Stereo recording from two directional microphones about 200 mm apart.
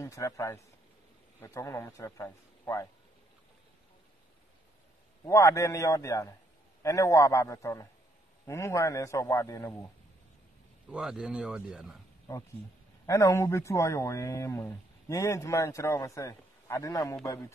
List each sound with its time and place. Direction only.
0.0 s speech: 15° left (ahead or behind)
5.2 s speech: 15° left (ahead or behind)
10.9 s speech: centre (ahead or behind)
13.0 s speech: 15° left (ahead or behind)